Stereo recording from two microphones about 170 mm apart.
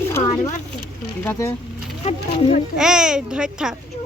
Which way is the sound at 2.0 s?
35° left (ahead or behind).